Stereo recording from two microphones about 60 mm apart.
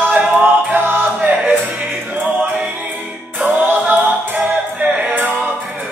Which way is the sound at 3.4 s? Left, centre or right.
Right.